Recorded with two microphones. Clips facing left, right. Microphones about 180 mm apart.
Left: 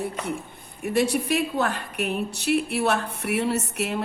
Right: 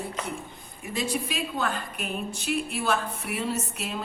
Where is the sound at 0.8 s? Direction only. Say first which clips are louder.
Left 7 dB; 65° left (ahead or behind).